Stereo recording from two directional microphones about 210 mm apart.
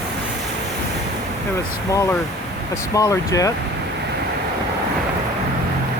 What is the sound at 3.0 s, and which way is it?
Speech, 15° left (ahead or behind).